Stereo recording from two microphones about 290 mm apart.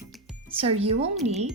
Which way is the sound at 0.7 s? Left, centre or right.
Right.